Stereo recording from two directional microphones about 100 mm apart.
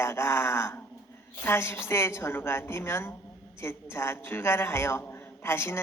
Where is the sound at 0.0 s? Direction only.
25° left (ahead or behind).